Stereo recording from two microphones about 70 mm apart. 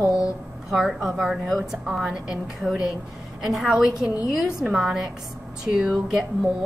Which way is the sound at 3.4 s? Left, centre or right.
Centre.